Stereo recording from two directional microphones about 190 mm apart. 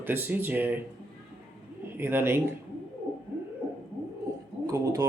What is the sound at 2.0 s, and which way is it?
Speech, 10° right (ahead or behind).